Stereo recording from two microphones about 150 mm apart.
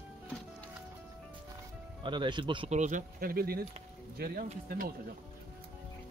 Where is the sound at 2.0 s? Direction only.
30° right (ahead or behind).